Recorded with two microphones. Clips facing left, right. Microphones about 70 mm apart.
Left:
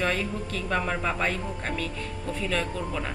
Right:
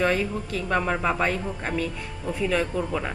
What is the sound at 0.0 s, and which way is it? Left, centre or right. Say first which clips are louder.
A woman's voice: right 4 dB; centre.